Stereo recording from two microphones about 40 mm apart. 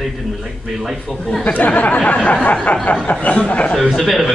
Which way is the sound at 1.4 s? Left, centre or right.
Left.